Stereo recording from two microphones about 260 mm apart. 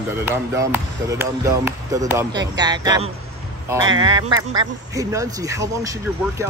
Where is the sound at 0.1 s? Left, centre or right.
Centre.